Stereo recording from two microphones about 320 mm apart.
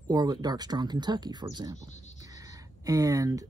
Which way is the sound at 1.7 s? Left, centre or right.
Left.